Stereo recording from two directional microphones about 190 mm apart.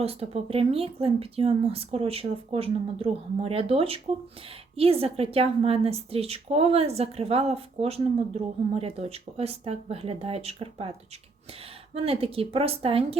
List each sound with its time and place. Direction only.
0.0 s a woman's voice: 30° right (ahead or behind)
11.9 s a woman's voice: 30° right (ahead or behind)